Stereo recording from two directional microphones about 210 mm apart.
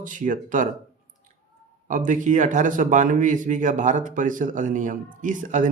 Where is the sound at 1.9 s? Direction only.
40° right (ahead or behind).